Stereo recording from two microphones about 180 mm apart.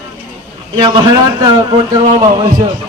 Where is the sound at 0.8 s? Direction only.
20° right (ahead or behind).